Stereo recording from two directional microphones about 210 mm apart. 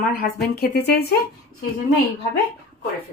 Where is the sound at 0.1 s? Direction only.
45° left (ahead or behind).